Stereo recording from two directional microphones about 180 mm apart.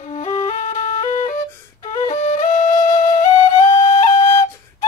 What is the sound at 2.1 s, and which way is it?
Flute, 30° left (ahead or behind).